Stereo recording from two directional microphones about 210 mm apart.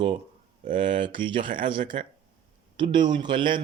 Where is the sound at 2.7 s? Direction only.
20° right (ahead or behind).